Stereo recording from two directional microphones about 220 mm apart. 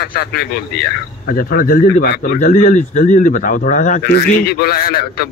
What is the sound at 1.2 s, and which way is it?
Speech, 40° left (ahead or behind).